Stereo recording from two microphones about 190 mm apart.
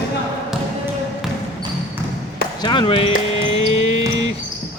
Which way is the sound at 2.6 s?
25° left (ahead or behind).